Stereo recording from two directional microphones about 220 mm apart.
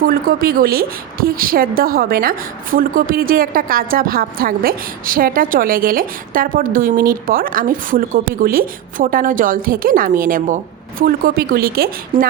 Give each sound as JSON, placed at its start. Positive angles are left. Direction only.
{"t": 0.0, "sound": "a woman's voice", "side_deg": -40}